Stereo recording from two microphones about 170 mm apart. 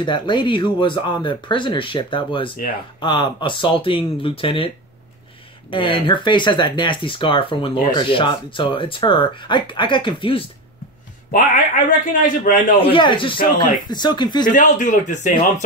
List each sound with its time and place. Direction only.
0.0 s speech: 25° left (ahead or behind)
5.7 s speech: 30° left (ahead or behind)
12.1 s speech: 50° left (ahead or behind)
12.8 s speech: 30° left (ahead or behind)
14.4 s speech: 50° left (ahead or behind)